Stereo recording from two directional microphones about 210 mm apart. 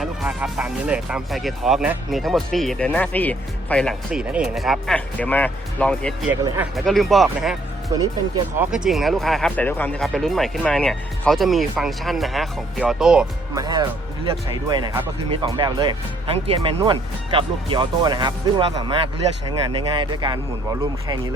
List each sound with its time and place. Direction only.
0.0 s speech: 5° right (ahead or behind)
7.9 s speech: 15° right (ahead or behind)
8.5 s speech: 5° right (ahead or behind)
13.5 s speech: 20° right (ahead or behind)